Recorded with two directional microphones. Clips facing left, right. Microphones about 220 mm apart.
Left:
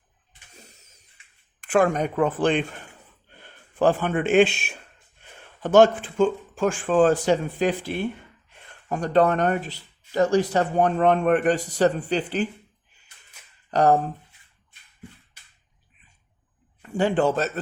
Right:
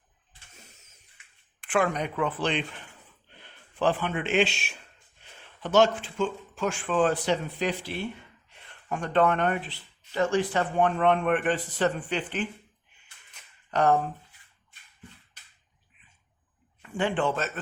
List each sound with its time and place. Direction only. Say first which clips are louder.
1.6 s speech: left 6 dB; 45° left (ahead or behind)
13.7 s speech: left 4 dB; 35° left (ahead or behind)
16.8 s a man's voice: left 6 dB; 40° left (ahead or behind)